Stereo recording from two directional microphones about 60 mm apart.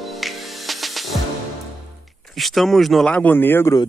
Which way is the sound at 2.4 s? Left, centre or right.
Centre.